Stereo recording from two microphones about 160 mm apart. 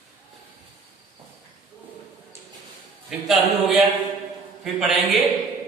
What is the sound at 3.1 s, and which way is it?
A man's voice, centre (ahead or behind).